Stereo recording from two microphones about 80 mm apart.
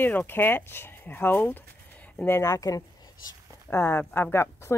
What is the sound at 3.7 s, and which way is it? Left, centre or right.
Speech, left.